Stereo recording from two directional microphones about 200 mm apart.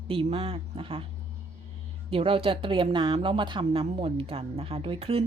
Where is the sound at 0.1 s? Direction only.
30° right (ahead or behind).